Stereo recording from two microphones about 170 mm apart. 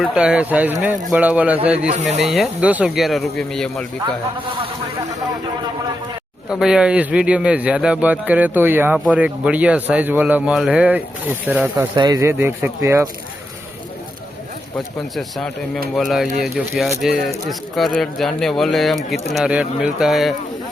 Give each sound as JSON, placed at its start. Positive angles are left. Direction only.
{"t": 0.0, "sound": "speech", "side_deg": -5}
{"t": 1.9, "sound": "speech", "side_deg": -40}
{"t": 2.2, "sound": "speech", "side_deg": 0}
{"t": 6.5, "sound": "speech", "side_deg": -5}
{"t": 11.9, "sound": "speech", "side_deg": -25}
{"t": 15.1, "sound": "speech", "side_deg": 0}